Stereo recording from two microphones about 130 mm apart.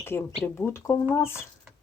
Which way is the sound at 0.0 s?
20° left (ahead or behind).